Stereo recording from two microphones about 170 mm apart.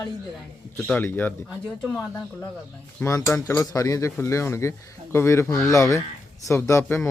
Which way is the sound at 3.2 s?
15° left (ahead or behind).